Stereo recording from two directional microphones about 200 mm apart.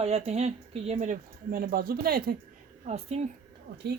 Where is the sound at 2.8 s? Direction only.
35° right (ahead or behind).